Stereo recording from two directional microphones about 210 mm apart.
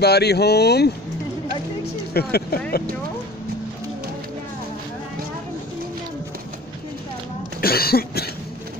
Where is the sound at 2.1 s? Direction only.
45° left (ahead or behind).